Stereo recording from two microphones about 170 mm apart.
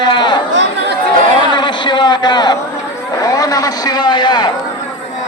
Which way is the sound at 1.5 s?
25° left (ahead or behind).